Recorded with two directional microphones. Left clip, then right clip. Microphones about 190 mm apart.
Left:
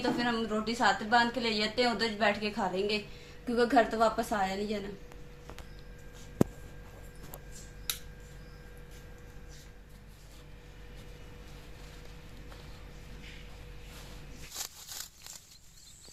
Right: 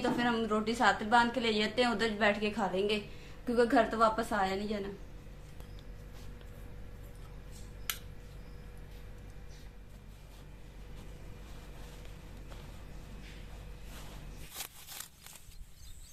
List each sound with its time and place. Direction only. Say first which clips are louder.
0.0 s a woman's voice: even; centre (ahead or behind)
3.4 s a woman's voice: left 1 dB; 20° left (ahead or behind)